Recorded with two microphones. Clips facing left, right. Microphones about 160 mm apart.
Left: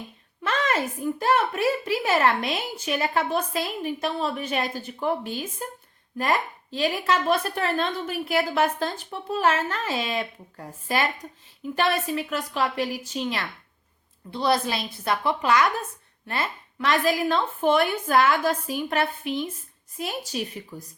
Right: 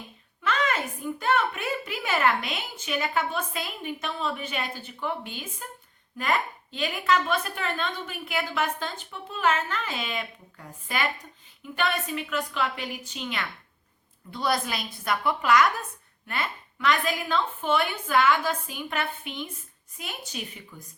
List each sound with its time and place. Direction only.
1.2 s a woman's voice: 35° left (ahead or behind)